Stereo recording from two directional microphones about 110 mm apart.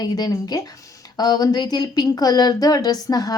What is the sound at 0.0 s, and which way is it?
Speech, 35° left (ahead or behind).